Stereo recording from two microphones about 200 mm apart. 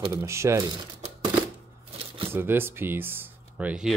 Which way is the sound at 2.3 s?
10° right (ahead or behind).